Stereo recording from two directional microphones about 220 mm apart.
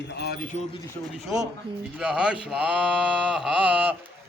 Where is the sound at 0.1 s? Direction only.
45° left (ahead or behind).